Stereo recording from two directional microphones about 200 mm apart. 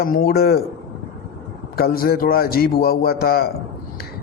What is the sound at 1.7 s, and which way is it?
A man's voice, 50° left (ahead or behind).